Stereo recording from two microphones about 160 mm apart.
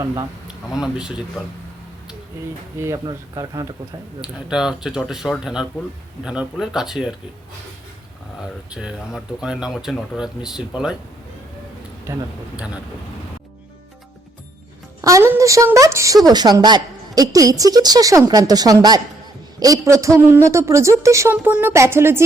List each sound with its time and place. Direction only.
0.0 s a man's voice: 20° right (ahead or behind)
0.4 s speech: 5° right (ahead or behind)
2.7 s a man's voice: 20° right (ahead or behind)
4.2 s speech: 5° right (ahead or behind)
8.4 s speech: 5° right (ahead or behind)
12.1 s speech: 15° right (ahead or behind)
15.0 s a man's voice: 20° right (ahead or behind)